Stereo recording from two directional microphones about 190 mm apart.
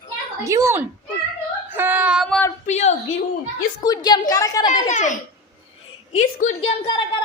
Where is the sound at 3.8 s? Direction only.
20° left (ahead or behind).